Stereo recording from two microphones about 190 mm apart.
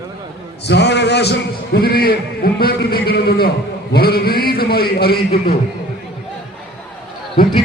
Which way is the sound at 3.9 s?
55° left (ahead or behind).